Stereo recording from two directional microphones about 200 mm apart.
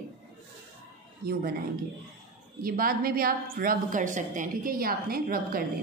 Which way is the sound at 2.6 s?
45° right (ahead or behind).